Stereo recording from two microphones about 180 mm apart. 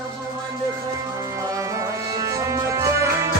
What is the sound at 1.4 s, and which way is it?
Music, 15° right (ahead or behind).